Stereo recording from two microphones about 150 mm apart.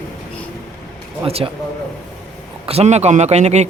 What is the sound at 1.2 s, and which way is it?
Speech, 40° right (ahead or behind).